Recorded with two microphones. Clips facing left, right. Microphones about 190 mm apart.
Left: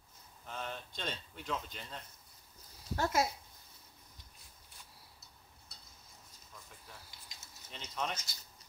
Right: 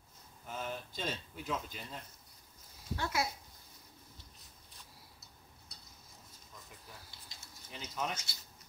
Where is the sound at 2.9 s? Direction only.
40° left (ahead or behind).